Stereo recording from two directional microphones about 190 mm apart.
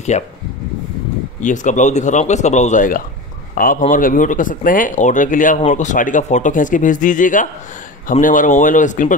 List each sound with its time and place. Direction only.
0.1 s speech: 35° left (ahead or behind)
1.4 s a man's voice: 40° left (ahead or behind)